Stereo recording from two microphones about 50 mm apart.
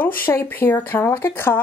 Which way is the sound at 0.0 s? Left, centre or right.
Left.